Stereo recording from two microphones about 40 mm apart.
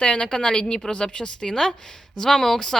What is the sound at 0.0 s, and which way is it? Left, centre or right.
A woman's voice, centre.